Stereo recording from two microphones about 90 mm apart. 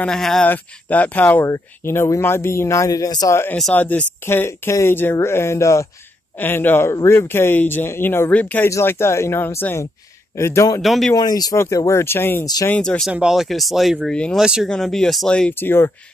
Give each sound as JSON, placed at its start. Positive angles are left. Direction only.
{"t": 0.0, "sound": "speech", "side_deg": 5}
{"t": 0.5, "sound": "speech", "side_deg": 20}
{"t": 1.4, "sound": "speech", "side_deg": 30}
{"t": 3.7, "sound": "speech", "side_deg": 20}
{"t": 6.4, "sound": "speech", "side_deg": 20}
{"t": 8.6, "sound": "speech", "side_deg": 30}
{"t": 10.8, "sound": "speech", "side_deg": 0}
{"t": 11.1, "sound": "speech", "side_deg": 45}
{"t": 11.5, "sound": "speech", "side_deg": 35}
{"t": 13.1, "sound": "speech", "side_deg": -5}
{"t": 14.7, "sound": "speech", "side_deg": 5}
{"t": 15.5, "sound": "speech", "side_deg": 25}